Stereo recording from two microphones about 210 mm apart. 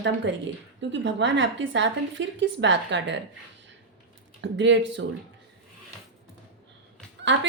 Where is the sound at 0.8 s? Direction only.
60° right (ahead or behind).